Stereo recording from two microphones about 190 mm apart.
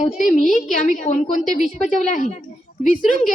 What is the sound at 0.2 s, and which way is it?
A woman's voice, 40° left (ahead or behind).